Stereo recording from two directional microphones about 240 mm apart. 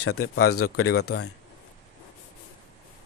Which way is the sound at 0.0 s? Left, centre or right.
Left.